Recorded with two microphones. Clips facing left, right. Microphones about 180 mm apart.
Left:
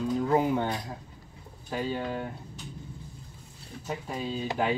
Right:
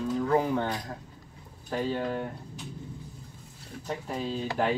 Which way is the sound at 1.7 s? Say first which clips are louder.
Right 2 dB; 5° left (ahead or behind).